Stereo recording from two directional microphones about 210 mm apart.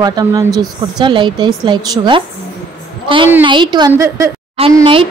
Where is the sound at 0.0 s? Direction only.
20° right (ahead or behind).